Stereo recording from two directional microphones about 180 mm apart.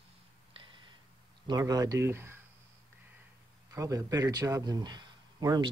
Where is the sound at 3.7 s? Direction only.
15° right (ahead or behind).